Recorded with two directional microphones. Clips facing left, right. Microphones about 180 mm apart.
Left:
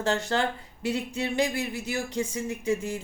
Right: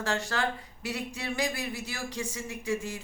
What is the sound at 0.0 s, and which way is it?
Speech, 25° left (ahead or behind).